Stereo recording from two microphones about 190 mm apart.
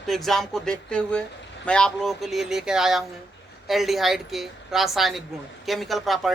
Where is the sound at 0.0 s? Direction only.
Centre (ahead or behind).